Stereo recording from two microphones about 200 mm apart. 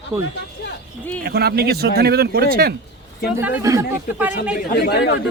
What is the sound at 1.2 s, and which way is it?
Speech, 50° right (ahead or behind).